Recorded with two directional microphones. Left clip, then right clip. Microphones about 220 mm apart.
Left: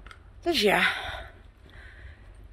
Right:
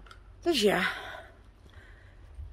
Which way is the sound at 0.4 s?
20° right (ahead or behind).